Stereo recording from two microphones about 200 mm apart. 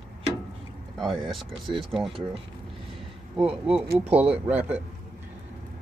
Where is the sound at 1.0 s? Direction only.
Centre (ahead or behind).